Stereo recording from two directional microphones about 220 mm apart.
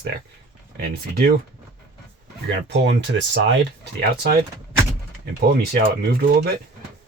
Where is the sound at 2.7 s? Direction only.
55° right (ahead or behind).